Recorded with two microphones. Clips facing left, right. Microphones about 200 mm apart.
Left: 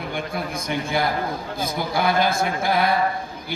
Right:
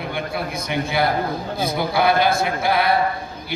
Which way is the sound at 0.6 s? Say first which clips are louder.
Right 3 dB; 45° left (ahead or behind).